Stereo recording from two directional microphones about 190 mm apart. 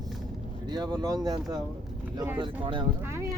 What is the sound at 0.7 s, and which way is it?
Speech, 20° right (ahead or behind).